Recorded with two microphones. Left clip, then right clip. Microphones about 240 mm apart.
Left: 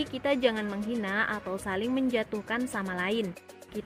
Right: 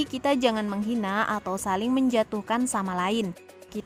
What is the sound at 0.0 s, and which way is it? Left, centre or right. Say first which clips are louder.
A woman's voice: right 3 dB; right.